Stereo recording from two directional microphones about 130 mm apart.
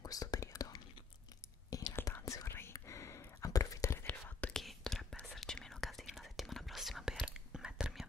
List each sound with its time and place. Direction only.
0.0 s whispering: 30° left (ahead or behind); by 8.1 s 5° right (ahead or behind)